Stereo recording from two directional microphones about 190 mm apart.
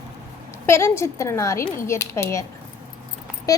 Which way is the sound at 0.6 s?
15° left (ahead or behind).